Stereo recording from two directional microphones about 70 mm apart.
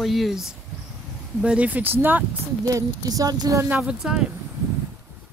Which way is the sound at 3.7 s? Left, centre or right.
Centre.